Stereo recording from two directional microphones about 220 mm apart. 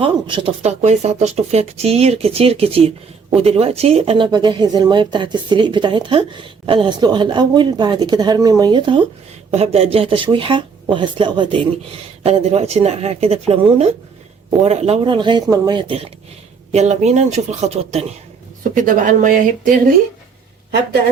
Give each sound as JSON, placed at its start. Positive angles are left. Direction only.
{"t": 0.0, "sound": "speech", "side_deg": -20}